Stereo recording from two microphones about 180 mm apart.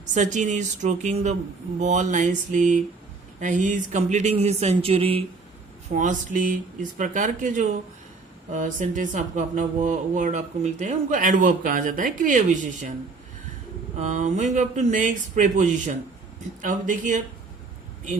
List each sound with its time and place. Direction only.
0.0 s speech: 45° right (ahead or behind)
5.9 s speech: 45° right (ahead or behind)
14.0 s speech: 45° right (ahead or behind)